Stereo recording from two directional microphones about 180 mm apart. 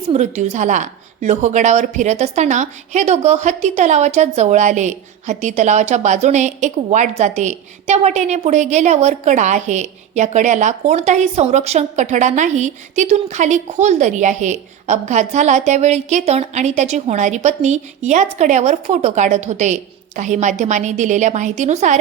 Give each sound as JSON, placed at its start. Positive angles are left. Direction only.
{"t": 0.1, "sound": "a woman's voice", "side_deg": -40}